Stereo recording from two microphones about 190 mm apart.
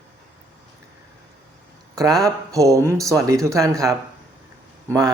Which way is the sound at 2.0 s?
20° right (ahead or behind).